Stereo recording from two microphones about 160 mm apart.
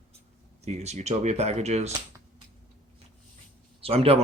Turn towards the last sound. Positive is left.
turn(degrees=-40)  # may be behind; listen again after turning